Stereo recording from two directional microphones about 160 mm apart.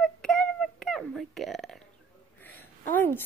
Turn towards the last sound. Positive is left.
turn(degrees=10)  # may be behind; listen again after turning